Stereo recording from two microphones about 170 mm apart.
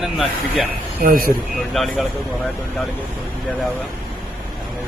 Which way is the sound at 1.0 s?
60° right (ahead or behind).